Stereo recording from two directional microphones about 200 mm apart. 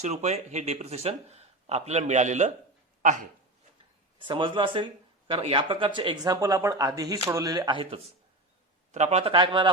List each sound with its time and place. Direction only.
0.0 s speech: 35° right (ahead or behind)
4.2 s speech: 25° right (ahead or behind)